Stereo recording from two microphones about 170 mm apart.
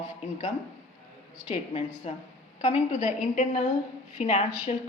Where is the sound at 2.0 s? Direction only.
40° left (ahead or behind).